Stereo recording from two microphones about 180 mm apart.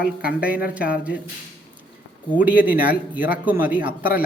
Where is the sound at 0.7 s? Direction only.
5° right (ahead or behind).